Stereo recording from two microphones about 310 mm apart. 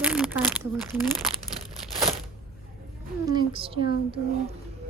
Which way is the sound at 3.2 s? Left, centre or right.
Centre.